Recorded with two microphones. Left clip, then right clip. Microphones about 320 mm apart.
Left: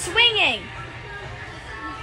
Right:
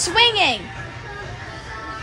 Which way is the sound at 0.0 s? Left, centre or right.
Centre.